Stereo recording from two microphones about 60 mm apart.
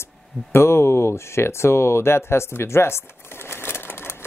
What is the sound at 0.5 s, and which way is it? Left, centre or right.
Speech, left.